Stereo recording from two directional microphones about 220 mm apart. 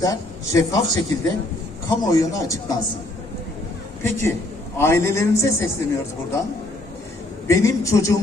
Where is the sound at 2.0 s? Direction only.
15° left (ahead or behind).